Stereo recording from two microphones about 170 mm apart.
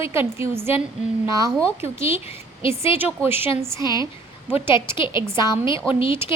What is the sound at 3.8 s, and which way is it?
A woman's voice, 25° left (ahead or behind).